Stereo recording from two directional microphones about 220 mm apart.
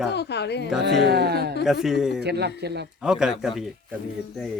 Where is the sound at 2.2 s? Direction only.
50° right (ahead or behind).